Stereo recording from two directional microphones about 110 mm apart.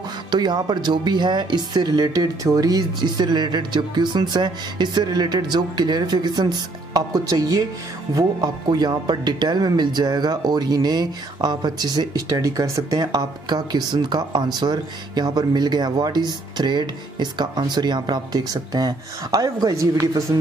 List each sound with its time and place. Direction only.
0.3 s speech: 40° right (ahead or behind)